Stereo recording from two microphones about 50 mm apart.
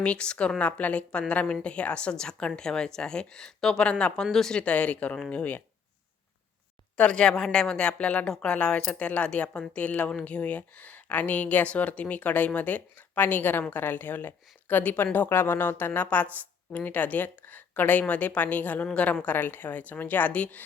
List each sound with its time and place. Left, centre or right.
0.0 s a woman's voice: left
4.6 s speech: left
6.9 s a woman's voice: left
15.3 s a woman's voice: left